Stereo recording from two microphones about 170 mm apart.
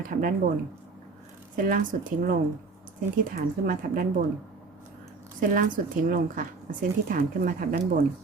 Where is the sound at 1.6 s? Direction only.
55° right (ahead or behind).